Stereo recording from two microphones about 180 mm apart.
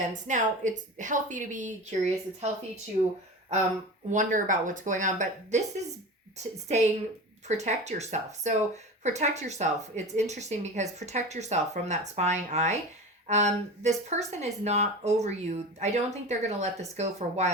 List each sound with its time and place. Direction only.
0.3 s a woman's voice: 45° right (ahead or behind)
7.4 s speech: 40° right (ahead or behind)